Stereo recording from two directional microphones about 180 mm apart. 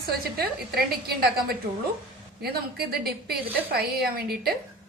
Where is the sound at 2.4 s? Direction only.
60° right (ahead or behind).